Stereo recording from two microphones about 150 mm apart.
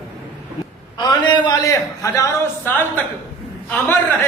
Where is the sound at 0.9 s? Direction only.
30° left (ahead or behind).